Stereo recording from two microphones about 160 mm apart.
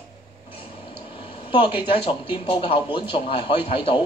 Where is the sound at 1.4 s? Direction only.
30° left (ahead or behind).